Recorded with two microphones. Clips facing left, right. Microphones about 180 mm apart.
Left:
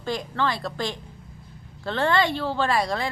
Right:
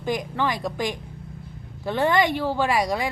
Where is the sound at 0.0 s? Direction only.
15° right (ahead or behind).